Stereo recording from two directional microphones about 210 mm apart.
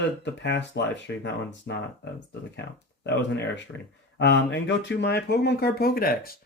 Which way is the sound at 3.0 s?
55° left (ahead or behind).